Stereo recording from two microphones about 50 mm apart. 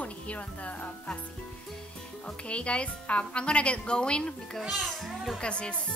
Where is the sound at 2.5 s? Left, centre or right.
Left.